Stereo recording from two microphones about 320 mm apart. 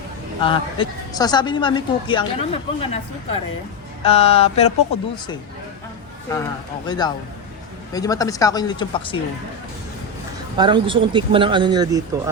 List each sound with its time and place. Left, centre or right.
0.3 s a man's voice: centre
4.0 s speech: centre
6.3 s a man's voice: centre
10.6 s speech: centre